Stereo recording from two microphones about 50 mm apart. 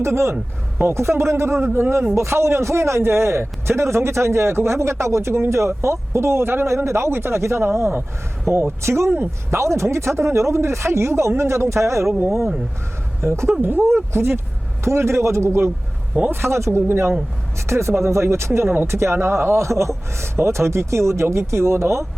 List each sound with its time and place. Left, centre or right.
0.0 s speech: right
0.8 s a man's voice: right
2.1 s a man's voice: right
6.7 s a man's voice: right
13.2 s a man's voice: right
13.6 s speech: right
13.8 s a man's voice: right
17.7 s a man's voice: right